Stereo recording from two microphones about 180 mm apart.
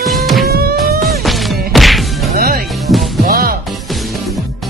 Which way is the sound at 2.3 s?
55° right (ahead or behind).